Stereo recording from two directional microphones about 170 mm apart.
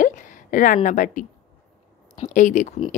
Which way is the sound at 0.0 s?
50° left (ahead or behind).